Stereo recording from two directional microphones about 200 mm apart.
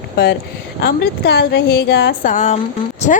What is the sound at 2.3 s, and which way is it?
Speech, 35° left (ahead or behind).